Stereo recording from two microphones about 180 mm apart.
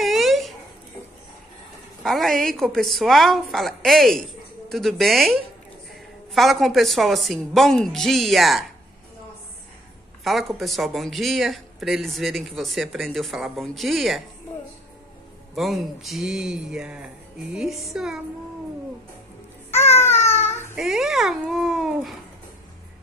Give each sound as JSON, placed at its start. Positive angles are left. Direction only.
{"t": 0.0, "sound": "a sound", "side_deg": 0}
{"t": 2.0, "sound": "speech", "side_deg": 0}
{"t": 10.2, "sound": "speech", "side_deg": 0}
{"t": 15.5, "sound": "speech", "side_deg": 0}
{"t": 19.7, "sound": "babbling", "side_deg": 15}
{"t": 20.7, "sound": "speech", "side_deg": 0}